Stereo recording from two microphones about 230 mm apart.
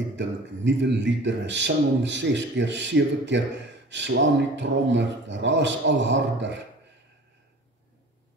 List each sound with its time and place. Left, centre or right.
0.1 s a man's voice: right